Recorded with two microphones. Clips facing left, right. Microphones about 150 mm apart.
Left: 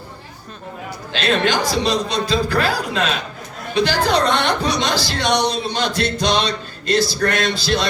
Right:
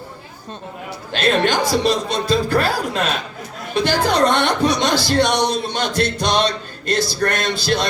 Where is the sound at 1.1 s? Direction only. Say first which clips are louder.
Right 1 dB; 50° right (ahead or behind).